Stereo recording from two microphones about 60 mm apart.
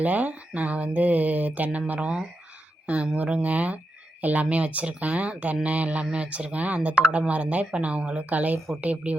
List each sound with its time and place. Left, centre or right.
0.0 s speech: right